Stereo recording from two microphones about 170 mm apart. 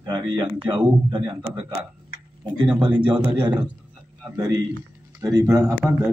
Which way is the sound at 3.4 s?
25° right (ahead or behind).